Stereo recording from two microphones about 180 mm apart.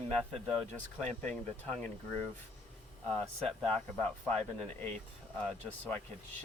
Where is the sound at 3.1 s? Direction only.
5° left (ahead or behind).